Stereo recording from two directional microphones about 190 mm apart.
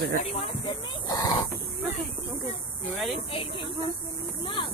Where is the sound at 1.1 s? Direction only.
20° left (ahead or behind).